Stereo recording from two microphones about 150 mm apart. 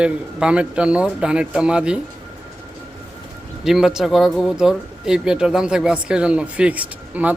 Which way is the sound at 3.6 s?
5° right (ahead or behind).